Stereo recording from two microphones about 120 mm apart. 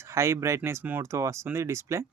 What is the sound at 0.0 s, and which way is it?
Speech, 25° right (ahead or behind).